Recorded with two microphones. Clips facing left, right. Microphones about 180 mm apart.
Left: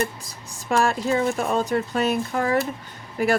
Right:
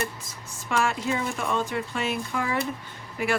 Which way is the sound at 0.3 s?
40° left (ahead or behind).